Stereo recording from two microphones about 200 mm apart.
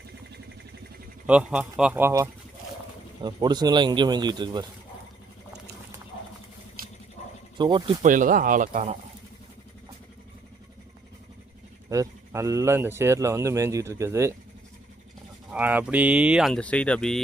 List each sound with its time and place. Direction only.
1.3 s speech: 5° right (ahead or behind); by 4.6 s 20° right (ahead or behind)
7.6 s speech: 25° right (ahead or behind)
8.0 s speech: 40° right (ahead or behind)
11.9 s speech: 15° right (ahead or behind)
15.5 s speech: 5° right (ahead or behind)